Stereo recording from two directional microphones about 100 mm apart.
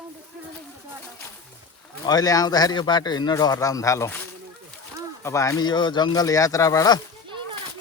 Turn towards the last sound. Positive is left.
turn(degrees=35)  # may be behind; listen again after turning